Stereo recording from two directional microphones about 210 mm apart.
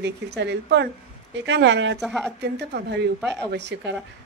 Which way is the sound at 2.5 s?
50° right (ahead or behind).